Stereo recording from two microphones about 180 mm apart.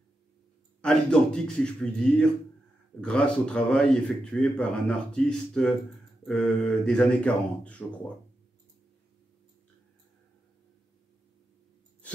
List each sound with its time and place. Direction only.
0.8 s a man's voice: 5° left (ahead or behind)